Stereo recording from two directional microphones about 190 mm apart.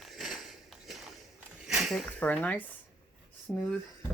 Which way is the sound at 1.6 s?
Centre (ahead or behind).